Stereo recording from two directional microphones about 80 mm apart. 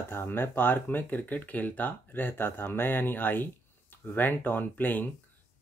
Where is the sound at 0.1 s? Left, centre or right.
Left.